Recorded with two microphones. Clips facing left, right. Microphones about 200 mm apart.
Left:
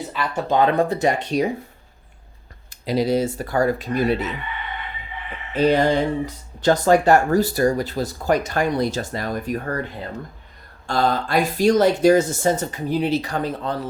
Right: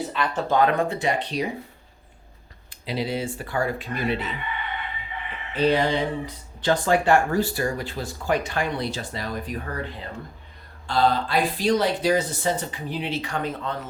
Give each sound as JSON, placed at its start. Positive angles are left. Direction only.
{"t": 0.1, "sound": "speech", "side_deg": 5}
{"t": 0.4, "sound": "speech", "side_deg": 25}
{"t": 2.6, "sound": "speech", "side_deg": 40}
{"t": 5.5, "sound": "speech", "side_deg": 45}
{"t": 10.8, "sound": "speech", "side_deg": 45}